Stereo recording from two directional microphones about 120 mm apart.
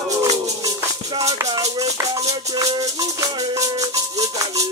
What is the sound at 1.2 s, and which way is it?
Speech, 30° right (ahead or behind).